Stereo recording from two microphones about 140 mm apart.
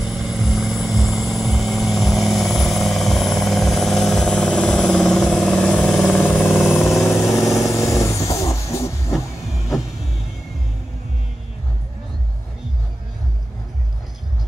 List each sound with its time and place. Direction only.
0.0 s vehicle: centre (ahead or behind)
6.5 s vehicle: centre (ahead or behind)
7.2 s vehicle: 20° left (ahead or behind)
7.4 s vehicle: centre (ahead or behind)
8.0 s vehicle: 20° left (ahead or behind)